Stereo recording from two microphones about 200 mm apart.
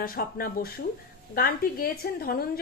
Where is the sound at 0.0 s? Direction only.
45° left (ahead or behind).